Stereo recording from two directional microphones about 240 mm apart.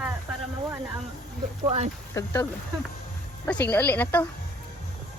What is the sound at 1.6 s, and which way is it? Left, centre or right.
Speech, right.